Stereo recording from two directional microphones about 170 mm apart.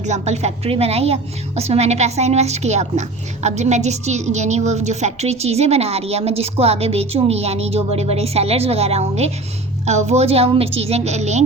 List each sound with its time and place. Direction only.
0.0 s a woman's voice: 40° right (ahead or behind)